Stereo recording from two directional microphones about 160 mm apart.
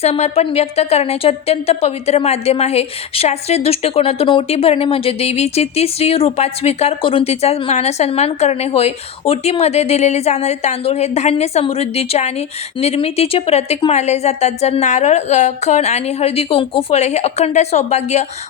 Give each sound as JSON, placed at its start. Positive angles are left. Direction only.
{"t": 0.0, "sound": "a woman's voice", "side_deg": 40}